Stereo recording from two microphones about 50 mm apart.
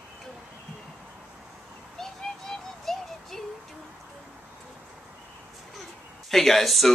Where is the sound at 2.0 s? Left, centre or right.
Centre.